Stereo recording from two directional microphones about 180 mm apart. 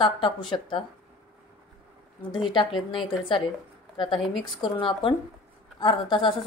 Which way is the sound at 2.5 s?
25° left (ahead or behind).